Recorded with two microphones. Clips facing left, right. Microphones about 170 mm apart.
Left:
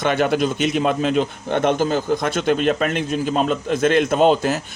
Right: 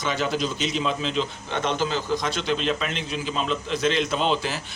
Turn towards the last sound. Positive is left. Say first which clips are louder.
# left 8 dB
turn(degrees=50)  # may be behind; listen again after turning